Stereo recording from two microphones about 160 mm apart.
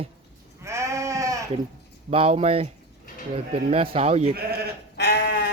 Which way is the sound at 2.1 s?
40° right (ahead or behind).